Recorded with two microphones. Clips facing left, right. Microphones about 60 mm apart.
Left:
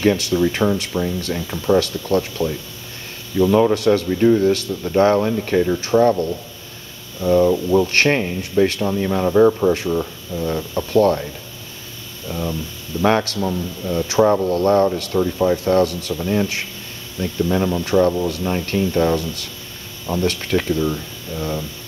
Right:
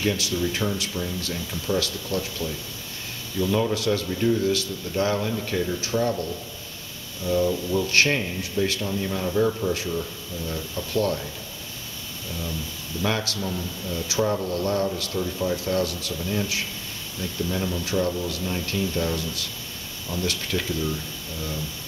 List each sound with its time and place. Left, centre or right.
0.0 s speech: left
12.3 s speech: left
13.4 s speech: left